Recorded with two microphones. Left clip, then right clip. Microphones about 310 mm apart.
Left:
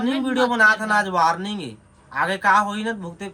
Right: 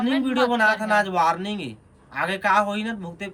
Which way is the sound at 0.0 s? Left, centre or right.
Centre.